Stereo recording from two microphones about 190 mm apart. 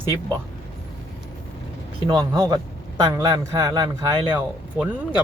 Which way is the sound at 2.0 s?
25° right (ahead or behind).